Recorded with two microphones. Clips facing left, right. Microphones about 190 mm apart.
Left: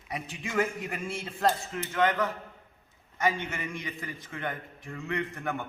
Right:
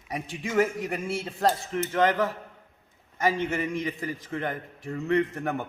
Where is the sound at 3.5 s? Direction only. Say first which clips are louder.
Right 8 dB; 40° right (ahead or behind).